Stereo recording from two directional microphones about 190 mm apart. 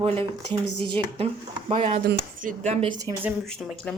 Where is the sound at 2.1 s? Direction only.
45° right (ahead or behind).